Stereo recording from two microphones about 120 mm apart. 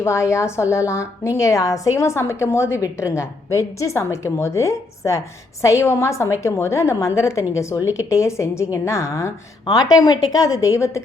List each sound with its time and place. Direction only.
0.0 s a woman's voice: 25° left (ahead or behind)